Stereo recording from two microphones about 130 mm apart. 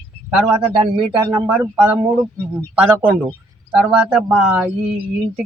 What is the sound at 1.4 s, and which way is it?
Speech, 10° right (ahead or behind).